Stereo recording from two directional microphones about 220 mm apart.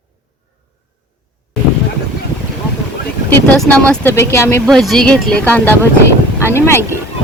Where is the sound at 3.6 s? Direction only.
5° left (ahead or behind).